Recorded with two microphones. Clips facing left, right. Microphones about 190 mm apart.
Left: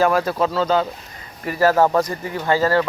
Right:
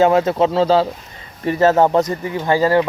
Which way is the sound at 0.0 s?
20° right (ahead or behind).